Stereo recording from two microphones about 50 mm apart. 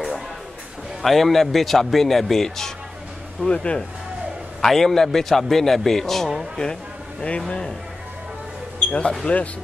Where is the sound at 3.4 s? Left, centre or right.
Left.